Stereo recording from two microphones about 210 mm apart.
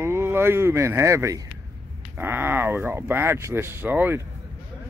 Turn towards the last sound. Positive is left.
turn(degrees=-10)  # may be behind; listen again after turning